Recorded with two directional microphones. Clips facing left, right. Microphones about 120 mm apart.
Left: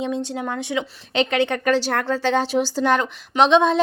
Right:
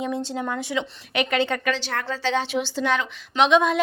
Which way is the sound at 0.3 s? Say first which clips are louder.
Left 1 dB; 15° left (ahead or behind).